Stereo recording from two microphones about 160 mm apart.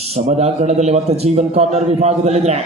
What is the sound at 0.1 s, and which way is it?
A man's voice, 45° right (ahead or behind).